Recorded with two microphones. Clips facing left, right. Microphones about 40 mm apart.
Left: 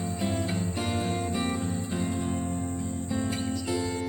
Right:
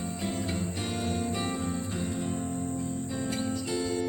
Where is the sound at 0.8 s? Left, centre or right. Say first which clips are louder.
Left 2 dB; left.